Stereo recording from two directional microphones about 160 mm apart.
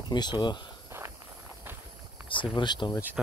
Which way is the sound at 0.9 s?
15° right (ahead or behind).